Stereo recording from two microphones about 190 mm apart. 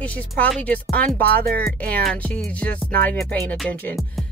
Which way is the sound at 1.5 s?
55° right (ahead or behind).